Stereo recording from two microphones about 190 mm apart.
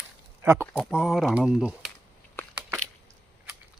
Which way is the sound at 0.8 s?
Centre (ahead or behind).